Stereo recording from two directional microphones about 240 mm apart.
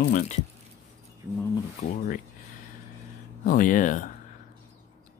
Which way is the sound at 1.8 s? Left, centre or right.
Left.